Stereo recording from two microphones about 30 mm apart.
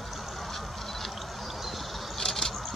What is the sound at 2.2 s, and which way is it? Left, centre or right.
Vehicle, centre.